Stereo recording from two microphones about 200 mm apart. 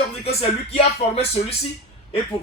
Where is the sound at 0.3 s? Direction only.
30° left (ahead or behind).